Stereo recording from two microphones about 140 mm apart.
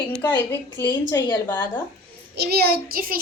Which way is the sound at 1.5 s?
15° left (ahead or behind).